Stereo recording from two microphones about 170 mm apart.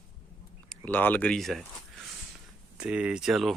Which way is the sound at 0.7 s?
10° left (ahead or behind).